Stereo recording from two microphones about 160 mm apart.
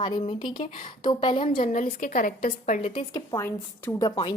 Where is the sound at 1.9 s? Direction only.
60° left (ahead or behind).